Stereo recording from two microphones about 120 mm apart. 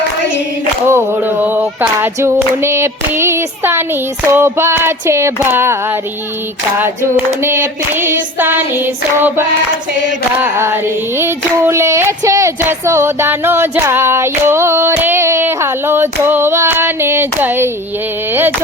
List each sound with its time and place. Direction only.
0.9 s female singing: 20° right (ahead or behind)
7.4 s female singing: 20° right (ahead or behind)
10.4 s female singing: 20° right (ahead or behind)